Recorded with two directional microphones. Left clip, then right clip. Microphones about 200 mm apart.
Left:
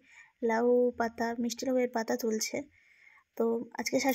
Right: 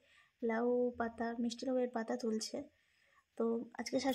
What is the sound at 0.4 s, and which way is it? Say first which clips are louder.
Speech: left 8 dB; 25° left (ahead or behind).